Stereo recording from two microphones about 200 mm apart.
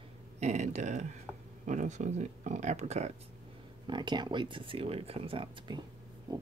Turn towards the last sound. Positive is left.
turn(degrees=-20)  # may be behind; listen again after turning